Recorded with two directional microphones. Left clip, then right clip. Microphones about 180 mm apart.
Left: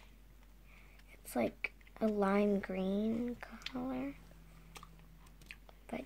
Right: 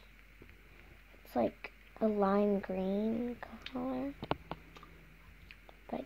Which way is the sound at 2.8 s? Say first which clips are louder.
Right 2 dB; 30° left (ahead or behind).